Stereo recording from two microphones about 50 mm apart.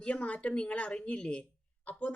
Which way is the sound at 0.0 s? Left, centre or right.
Left.